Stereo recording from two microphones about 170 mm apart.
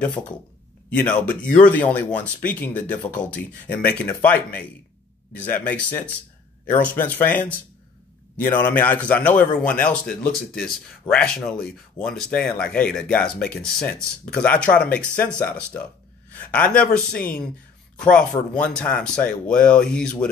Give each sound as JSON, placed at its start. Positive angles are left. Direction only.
{"t": 0.2, "sound": "speech", "side_deg": 15}
{"t": 16.3, "sound": "speech", "side_deg": 10}